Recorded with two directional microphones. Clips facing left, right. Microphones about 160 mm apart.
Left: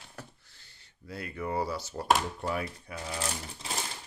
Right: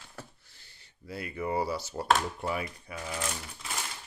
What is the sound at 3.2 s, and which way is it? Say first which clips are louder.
Speech: left 1 dB; 30° left (ahead or behind).